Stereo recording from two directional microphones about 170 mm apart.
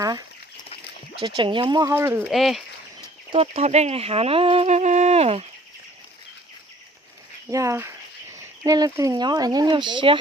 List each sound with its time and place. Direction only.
1.2 s speech: 30° right (ahead or behind)
1.9 s speech: 15° right (ahead or behind)
2.3 s speech: centre (ahead or behind)
3.3 s speech: 35° right (ahead or behind)
7.5 s speech: 15° right (ahead or behind)